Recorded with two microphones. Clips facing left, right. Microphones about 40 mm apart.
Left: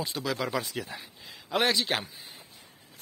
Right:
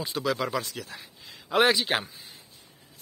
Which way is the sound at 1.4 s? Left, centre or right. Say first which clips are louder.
Right 4 dB; centre.